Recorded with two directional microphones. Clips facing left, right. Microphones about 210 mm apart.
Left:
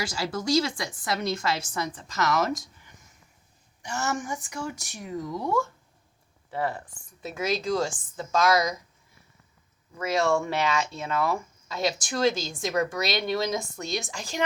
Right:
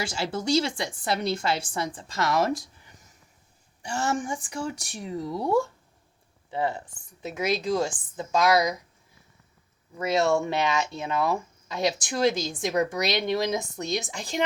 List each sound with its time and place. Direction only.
0.0 s speech: 25° right (ahead or behind)
3.8 s speech: 30° right (ahead or behind)
6.5 s speech: 20° right (ahead or behind)
10.0 s speech: 25° right (ahead or behind)